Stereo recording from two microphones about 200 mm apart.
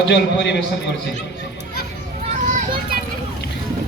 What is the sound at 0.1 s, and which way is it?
Music, 60° left (ahead or behind).